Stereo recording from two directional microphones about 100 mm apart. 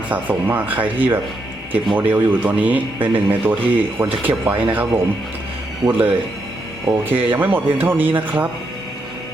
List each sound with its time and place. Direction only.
0.1 s a man's voice: 20° right (ahead or behind)